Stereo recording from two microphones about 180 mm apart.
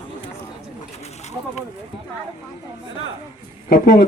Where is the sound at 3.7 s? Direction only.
55° left (ahead or behind).